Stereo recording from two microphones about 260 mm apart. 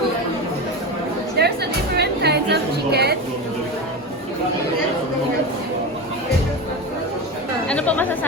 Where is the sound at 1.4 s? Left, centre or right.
Right.